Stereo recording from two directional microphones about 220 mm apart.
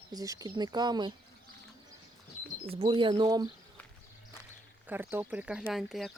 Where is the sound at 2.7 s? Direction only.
25° right (ahead or behind).